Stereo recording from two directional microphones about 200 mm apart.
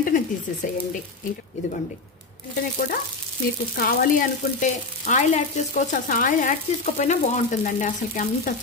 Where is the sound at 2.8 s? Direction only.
40° left (ahead or behind).